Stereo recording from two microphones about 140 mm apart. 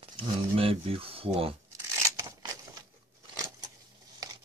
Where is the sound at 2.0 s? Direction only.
20° right (ahead or behind).